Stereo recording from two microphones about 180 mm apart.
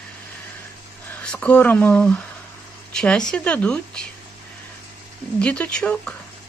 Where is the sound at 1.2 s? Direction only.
5° left (ahead or behind).